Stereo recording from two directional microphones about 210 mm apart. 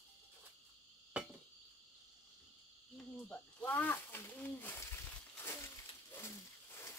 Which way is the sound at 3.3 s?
10° left (ahead or behind).